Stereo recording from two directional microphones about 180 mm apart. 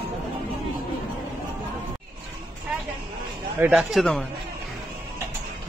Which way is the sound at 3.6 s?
10° right (ahead or behind).